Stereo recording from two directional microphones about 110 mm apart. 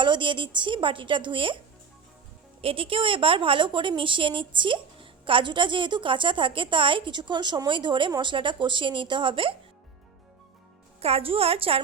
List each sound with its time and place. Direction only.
0.0 s a woman's voice: 45° right (ahead or behind)
2.6 s a woman's voice: 55° right (ahead or behind)
11.0 s a woman's voice: 60° right (ahead or behind)